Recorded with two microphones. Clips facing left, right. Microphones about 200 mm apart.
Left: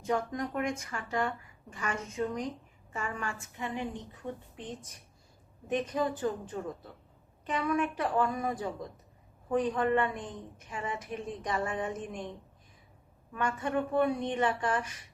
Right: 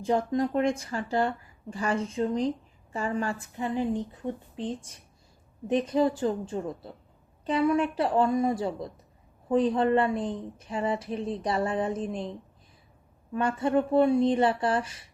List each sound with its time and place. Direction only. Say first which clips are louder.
0.0 s a woman's voice: right 6 dB; 30° right (ahead or behind)
13.3 s a woman's voice: right 6 dB; 30° right (ahead or behind)